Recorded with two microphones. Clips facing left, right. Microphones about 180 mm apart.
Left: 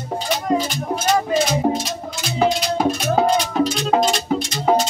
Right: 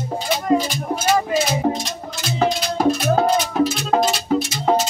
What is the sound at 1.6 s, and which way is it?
Music, 10° left (ahead or behind).